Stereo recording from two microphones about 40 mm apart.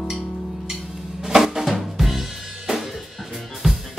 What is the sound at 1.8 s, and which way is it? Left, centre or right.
Drum kit, centre.